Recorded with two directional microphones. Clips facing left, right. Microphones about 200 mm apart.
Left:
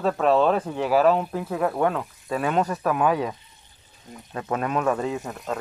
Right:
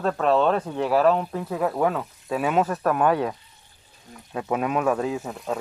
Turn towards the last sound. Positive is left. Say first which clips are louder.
# right 1 dB
turn(degrees=0)  # may be behind; listen again after turning